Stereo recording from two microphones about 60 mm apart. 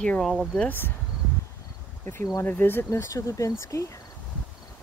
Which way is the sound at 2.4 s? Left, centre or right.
Left.